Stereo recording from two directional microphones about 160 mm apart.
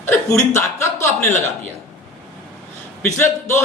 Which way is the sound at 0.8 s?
15° left (ahead or behind).